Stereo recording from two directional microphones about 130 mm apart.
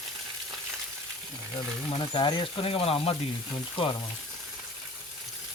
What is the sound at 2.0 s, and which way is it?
Speech, 40° left (ahead or behind).